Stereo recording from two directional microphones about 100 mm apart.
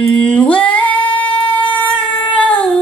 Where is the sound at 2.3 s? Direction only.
10° left (ahead or behind).